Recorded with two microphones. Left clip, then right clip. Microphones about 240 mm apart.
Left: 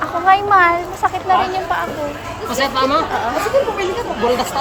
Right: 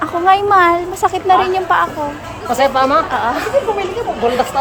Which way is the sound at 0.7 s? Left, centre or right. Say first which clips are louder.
Right 3 dB; right.